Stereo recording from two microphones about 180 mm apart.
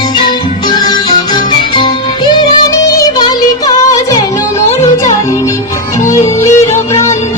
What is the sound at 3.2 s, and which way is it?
Music, 20° left (ahead or behind).